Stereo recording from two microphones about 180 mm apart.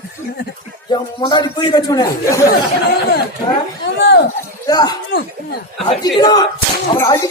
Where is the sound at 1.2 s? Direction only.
25° left (ahead or behind).